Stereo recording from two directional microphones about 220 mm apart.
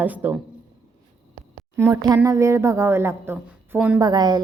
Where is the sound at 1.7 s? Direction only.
10° right (ahead or behind).